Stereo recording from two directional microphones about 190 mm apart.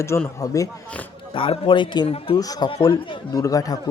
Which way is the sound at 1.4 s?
25° left (ahead or behind).